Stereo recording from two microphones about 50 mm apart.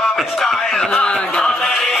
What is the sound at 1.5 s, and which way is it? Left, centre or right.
Music, centre.